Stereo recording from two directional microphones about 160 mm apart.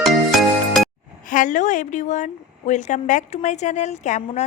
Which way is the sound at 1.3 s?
55° left (ahead or behind).